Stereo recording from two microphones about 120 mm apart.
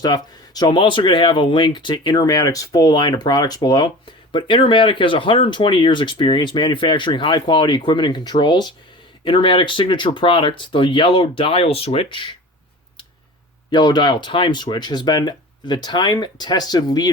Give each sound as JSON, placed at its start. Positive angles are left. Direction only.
{"t": 0.0, "sound": "speech", "side_deg": 35}
{"t": 13.7, "sound": "speech", "side_deg": 35}